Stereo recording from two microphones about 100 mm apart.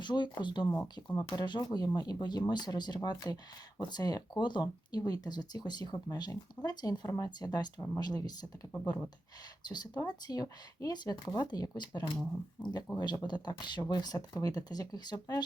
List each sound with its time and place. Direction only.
0.0 s speech: 50° left (ahead or behind)
9.6 s speech: 45° left (ahead or behind)